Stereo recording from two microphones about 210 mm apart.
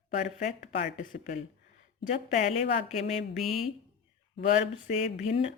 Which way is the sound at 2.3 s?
30° left (ahead or behind).